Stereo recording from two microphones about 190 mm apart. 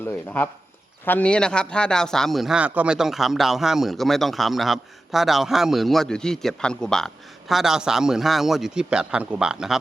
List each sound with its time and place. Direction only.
0.0 s a man's voice: 10° left (ahead or behind)